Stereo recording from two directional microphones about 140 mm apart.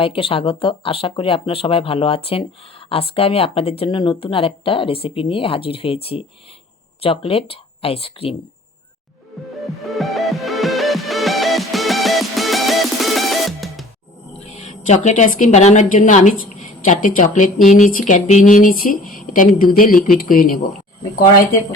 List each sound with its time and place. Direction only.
0.0 s speech: 40° left (ahead or behind)
9.8 s music: centre (ahead or behind)
14.7 s a woman's voice: 55° left (ahead or behind); by 20.6 s 80° left